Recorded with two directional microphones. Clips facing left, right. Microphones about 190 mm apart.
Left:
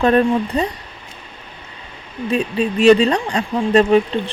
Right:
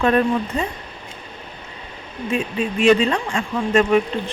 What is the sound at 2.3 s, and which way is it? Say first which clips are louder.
Speech: left 4 dB; 35° left (ahead or behind).